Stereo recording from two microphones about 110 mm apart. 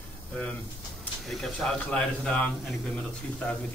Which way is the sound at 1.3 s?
5° left (ahead or behind).